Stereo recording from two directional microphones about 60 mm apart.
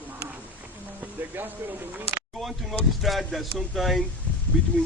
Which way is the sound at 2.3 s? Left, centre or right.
Centre.